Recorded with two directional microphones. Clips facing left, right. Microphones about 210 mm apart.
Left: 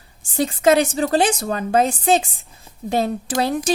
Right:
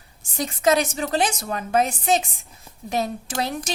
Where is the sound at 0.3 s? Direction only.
30° left (ahead or behind).